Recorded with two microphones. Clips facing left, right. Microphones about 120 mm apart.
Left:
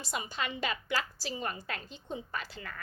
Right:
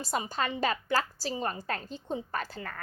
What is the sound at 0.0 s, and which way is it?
A woman's voice, 40° right (ahead or behind).